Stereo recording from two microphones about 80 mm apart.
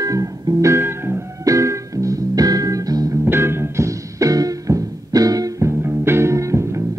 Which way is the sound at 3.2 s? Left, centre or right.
Right.